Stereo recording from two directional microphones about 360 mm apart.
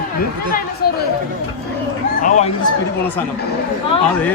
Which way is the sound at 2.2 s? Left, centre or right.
Centre.